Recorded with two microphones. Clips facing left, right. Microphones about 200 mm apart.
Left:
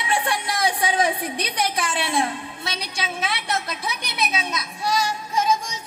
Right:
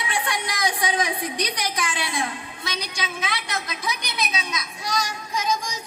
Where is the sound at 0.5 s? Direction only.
30° left (ahead or behind).